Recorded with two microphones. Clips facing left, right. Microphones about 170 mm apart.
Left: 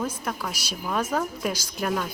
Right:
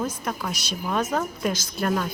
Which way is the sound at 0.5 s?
10° left (ahead or behind).